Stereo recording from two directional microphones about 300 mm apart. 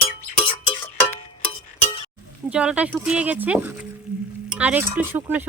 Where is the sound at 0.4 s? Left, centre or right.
Centre.